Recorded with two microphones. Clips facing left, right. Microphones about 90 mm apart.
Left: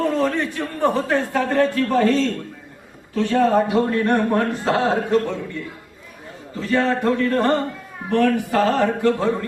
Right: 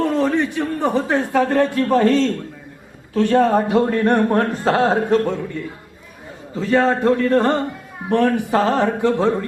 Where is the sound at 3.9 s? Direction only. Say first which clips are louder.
Right 2 dB; 40° right (ahead or behind).